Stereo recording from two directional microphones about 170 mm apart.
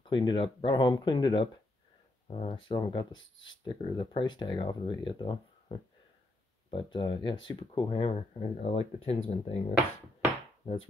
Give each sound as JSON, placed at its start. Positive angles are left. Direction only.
{"t": 0.0, "sound": "speech", "side_deg": 25}